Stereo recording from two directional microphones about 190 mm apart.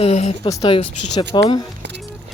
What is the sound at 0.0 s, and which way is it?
Speech, 35° left (ahead or behind).